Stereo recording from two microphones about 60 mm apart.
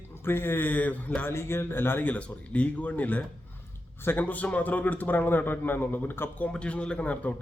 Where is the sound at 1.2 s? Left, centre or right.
Left.